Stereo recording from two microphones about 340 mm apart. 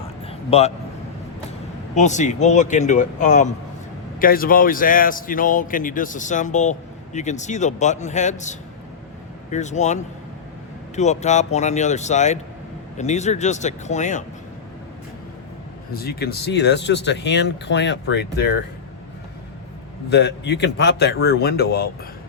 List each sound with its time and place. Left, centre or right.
0.3 s a sound: centre
2.0 s a man's voice: left
15.9 s speech: left
20.1 s a man's voice: left